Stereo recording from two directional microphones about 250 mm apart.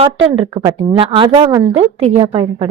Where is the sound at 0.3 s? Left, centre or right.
Right.